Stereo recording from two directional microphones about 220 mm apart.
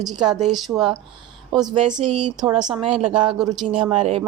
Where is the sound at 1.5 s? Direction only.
20° right (ahead or behind).